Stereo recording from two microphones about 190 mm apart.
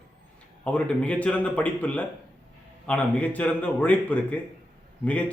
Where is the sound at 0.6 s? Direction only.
5° left (ahead or behind).